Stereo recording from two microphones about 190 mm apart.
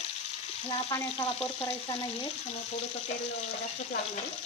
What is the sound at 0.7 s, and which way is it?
Frying, 20° left (ahead or behind).